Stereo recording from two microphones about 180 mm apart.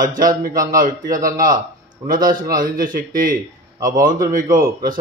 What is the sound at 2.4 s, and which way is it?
Speech, 50° right (ahead or behind).